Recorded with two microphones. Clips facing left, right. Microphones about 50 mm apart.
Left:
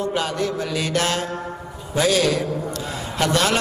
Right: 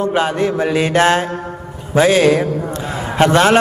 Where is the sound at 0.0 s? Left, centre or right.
Right.